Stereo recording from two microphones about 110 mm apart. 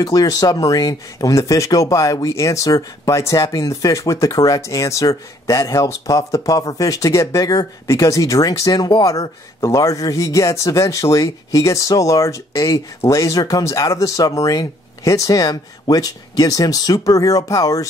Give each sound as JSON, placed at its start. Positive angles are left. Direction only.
{"t": 0.0, "sound": "speech", "side_deg": 35}